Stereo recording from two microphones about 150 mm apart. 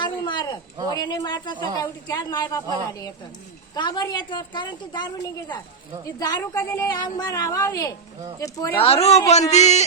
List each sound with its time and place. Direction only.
0.0 s a sound: 30° left (ahead or behind)
0.9 s a woman's voice: 25° left (ahead or behind)
3.8 s a woman's voice: 30° left (ahead or behind)
8.8 s speech: 45° left (ahead or behind)